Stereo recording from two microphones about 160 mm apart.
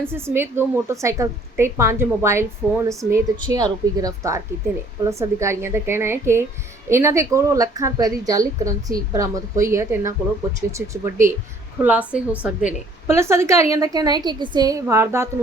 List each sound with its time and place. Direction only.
0.1 s a woman's voice: 15° right (ahead or behind)